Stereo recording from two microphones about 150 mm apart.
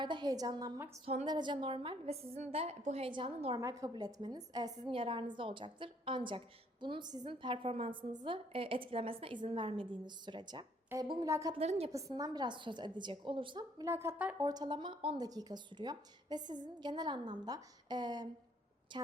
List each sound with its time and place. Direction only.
0.0 s a woman's voice: 30° right (ahead or behind)
1.0 s a woman's voice: 50° right (ahead or behind)
1.3 s a woman's voice: 30° right (ahead or behind)
3.6 s a woman's voice: 20° right (ahead or behind)
11.5 s a woman's voice: 45° right (ahead or behind)
11.9 s a woman's voice: 20° right (ahead or behind)
14.4 s a woman's voice: 25° right (ahead or behind)